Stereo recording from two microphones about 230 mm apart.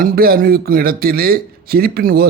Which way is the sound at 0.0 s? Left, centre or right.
Right.